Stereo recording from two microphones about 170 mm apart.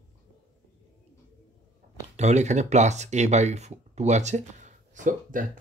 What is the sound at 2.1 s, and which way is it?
Speech, 40° right (ahead or behind).